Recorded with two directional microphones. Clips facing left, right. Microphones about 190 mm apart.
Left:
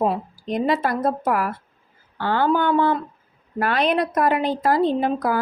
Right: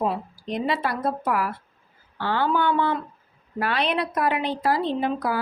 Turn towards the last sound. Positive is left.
turn(degrees=45)  # may be behind; listen again after turning